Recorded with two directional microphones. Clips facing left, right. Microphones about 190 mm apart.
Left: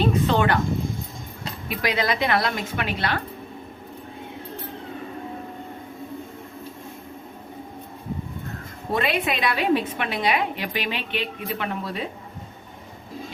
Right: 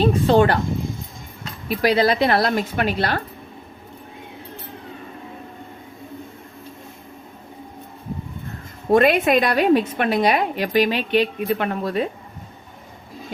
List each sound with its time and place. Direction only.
0.0 s a sound: 35° right (ahead or behind)
1.7 s a woman's voice: 35° right (ahead or behind)
8.9 s a woman's voice: 45° right (ahead or behind)